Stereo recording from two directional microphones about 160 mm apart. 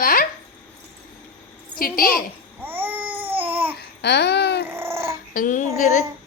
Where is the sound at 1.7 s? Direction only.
65° left (ahead or behind).